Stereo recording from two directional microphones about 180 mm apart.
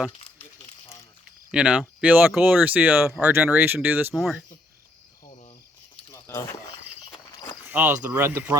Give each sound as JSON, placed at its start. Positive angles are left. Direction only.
{"t": 1.5, "sound": "speech", "side_deg": -5}
{"t": 4.1, "sound": "speech", "side_deg": 0}
{"t": 6.1, "sound": "a sound", "side_deg": 15}
{"t": 7.6, "sound": "speech", "side_deg": -10}